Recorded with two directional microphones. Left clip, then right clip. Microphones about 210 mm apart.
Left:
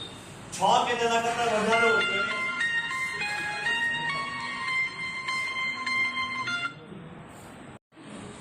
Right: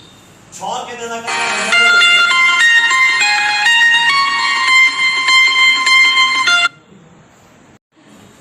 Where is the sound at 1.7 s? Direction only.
45° right (ahead or behind).